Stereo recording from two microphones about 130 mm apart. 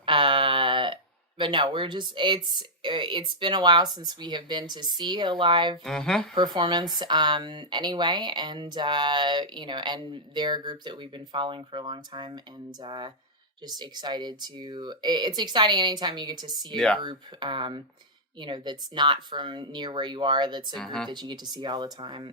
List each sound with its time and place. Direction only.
0.0 s a sound: 40° right (ahead or behind)
1.4 s speech: 35° right (ahead or behind)
5.8 s speech: 5° left (ahead or behind)
6.3 s speech: 35° right (ahead or behind)
16.7 s speech: 5° left (ahead or behind)
17.0 s speech: 35° right (ahead or behind)
20.7 s speech: 5° left (ahead or behind)
21.1 s speech: 35° right (ahead or behind)